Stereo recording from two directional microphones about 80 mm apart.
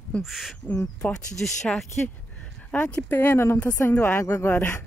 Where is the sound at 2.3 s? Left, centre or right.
Centre.